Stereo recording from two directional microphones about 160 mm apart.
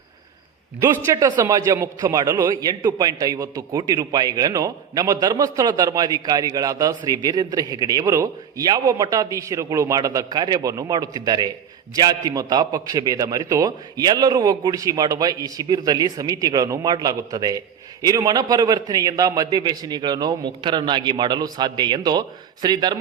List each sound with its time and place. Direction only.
1.0 s a man's voice: 20° right (ahead or behind)